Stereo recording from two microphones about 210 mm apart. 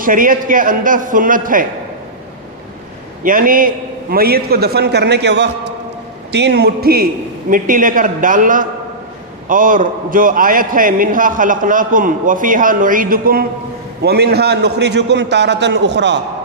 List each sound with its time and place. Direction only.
0.0 s a man's voice: 40° right (ahead or behind)
3.2 s a man's voice: 40° right (ahead or behind); by 16.1 s 55° right (ahead or behind)